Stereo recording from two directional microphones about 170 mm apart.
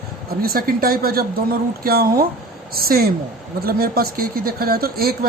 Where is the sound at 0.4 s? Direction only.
60° right (ahead or behind).